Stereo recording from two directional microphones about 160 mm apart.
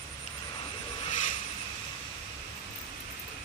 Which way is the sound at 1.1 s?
50° left (ahead or behind).